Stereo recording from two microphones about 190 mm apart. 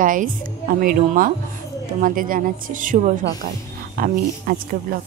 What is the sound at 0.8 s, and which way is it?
Speech, 45° right (ahead or behind).